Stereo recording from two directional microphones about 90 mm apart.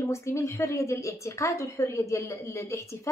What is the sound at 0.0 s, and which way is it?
A woman's voice, 30° left (ahead or behind).